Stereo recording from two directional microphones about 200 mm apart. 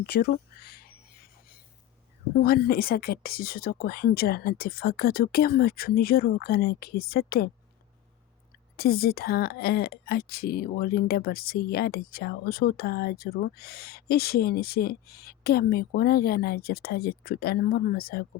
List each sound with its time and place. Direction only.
2.3 s speech: 50° left (ahead or behind)
8.7 s speech: 50° left (ahead or behind)